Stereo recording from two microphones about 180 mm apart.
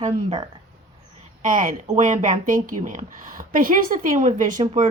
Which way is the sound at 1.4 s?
45° right (ahead or behind).